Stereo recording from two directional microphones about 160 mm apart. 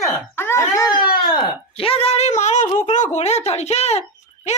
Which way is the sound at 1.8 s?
35° left (ahead or behind).